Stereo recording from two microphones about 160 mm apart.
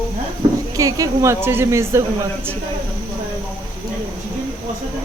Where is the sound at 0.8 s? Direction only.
20° right (ahead or behind).